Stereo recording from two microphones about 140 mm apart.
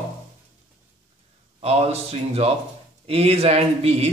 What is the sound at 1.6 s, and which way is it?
A man's voice, 45° right (ahead or behind).